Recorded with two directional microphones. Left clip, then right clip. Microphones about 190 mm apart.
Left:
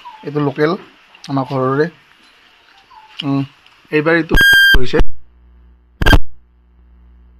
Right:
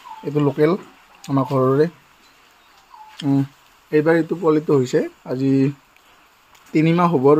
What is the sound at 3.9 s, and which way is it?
Speech, centre (ahead or behind).